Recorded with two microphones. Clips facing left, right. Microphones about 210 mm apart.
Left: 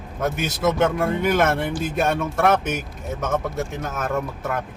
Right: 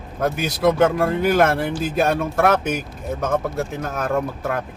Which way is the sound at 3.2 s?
35° right (ahead or behind).